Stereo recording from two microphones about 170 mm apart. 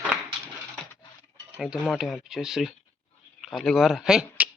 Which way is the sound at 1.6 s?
Centre (ahead or behind).